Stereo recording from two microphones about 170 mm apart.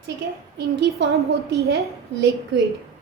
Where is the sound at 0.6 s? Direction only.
80° right.